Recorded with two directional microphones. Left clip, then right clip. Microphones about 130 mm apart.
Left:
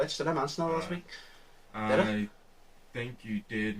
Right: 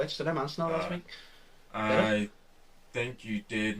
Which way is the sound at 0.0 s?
20° right (ahead or behind).